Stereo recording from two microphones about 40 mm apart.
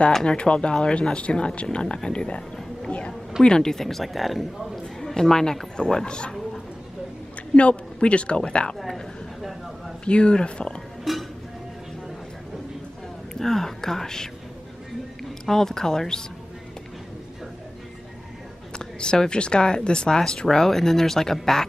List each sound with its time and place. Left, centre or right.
0.2 s speech: left
3.4 s speech: centre
5.0 s speech: centre
7.5 s speech: left
8.7 s speech: centre
9.4 s a sound: centre
10.0 s speech: left
11.1 s a sound: centre
13.3 s speech: centre
15.4 s speech: centre
18.8 s speech: left